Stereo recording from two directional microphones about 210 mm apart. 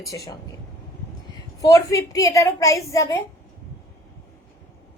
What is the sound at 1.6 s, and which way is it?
A woman's voice, 15° left (ahead or behind).